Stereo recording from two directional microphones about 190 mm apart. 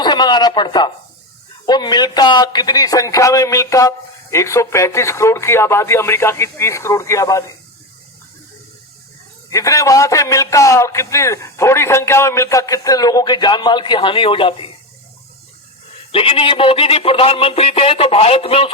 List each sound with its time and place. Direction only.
0.0 s radio: 20° left (ahead or behind)
1.6 s speech: 20° left (ahead or behind)
9.5 s speech: 15° left (ahead or behind)
16.1 s a sound: 30° left (ahead or behind)